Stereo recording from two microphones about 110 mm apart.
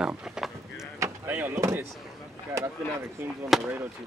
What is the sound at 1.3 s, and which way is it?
Door, 20° right (ahead or behind).